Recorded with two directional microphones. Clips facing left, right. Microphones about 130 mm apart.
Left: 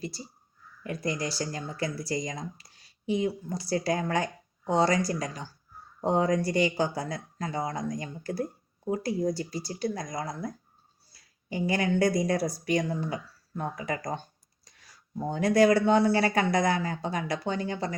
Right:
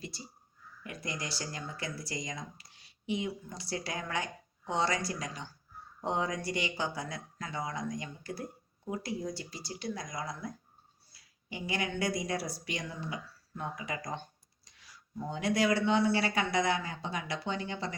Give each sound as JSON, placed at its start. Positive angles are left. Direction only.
{"t": 0.9, "sound": "speech", "side_deg": 35}